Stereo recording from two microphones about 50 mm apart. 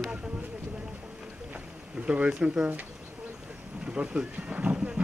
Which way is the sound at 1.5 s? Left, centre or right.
Right.